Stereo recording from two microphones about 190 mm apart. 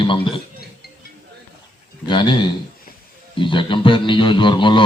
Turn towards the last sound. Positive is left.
turn(degrees=25)  # may be behind; listen again after turning